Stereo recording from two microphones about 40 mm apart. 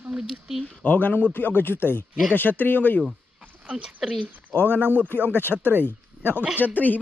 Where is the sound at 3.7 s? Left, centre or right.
Centre.